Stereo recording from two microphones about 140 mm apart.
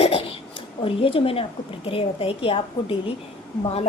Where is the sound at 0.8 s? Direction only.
40° left (ahead or behind).